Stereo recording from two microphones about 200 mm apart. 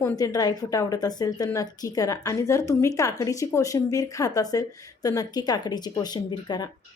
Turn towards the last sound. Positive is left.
turn(degrees=20)  # may be behind; listen again after turning